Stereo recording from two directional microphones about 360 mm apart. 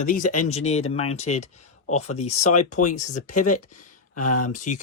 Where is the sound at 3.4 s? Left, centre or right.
Left.